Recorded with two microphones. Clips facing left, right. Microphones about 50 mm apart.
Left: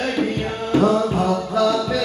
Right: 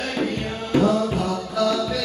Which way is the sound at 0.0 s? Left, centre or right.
Left.